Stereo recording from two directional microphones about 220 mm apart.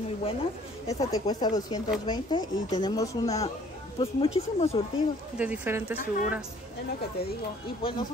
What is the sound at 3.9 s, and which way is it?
Speech, 25° left (ahead or behind).